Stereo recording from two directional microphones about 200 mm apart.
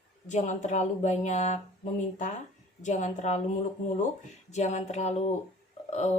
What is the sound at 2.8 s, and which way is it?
Speech, 35° left (ahead or behind).